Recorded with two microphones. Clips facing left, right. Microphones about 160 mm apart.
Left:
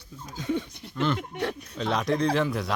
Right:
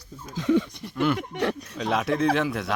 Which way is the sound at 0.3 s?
90° right.